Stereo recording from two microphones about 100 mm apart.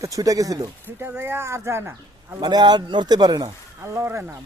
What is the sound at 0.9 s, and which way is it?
Speech, 25° right (ahead or behind).